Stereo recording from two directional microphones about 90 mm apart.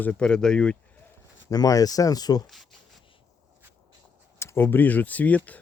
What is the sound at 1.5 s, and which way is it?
Speech, 40° left (ahead or behind).